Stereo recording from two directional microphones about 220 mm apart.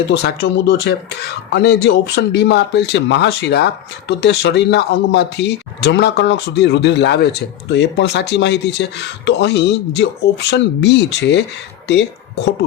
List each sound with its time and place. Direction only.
0.1 s speech: 50° left (ahead or behind)